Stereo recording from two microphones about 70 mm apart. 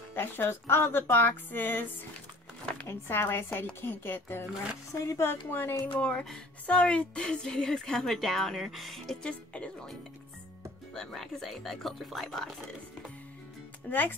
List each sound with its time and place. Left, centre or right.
0.1 s a woman's voice: left
2.6 s a sound: centre
2.9 s a woman's voice: left
5.9 s a woman's voice: centre
9.2 s a woman's voice: centre
11.0 s speech: centre
13.8 s speech: left